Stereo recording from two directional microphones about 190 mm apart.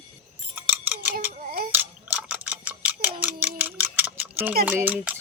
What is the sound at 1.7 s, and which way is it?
Clock, 10° right (ahead or behind).